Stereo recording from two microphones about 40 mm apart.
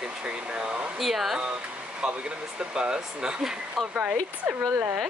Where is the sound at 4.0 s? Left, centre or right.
Right.